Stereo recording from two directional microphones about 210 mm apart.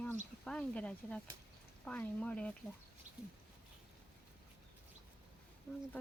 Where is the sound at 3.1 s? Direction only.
35° right (ahead or behind).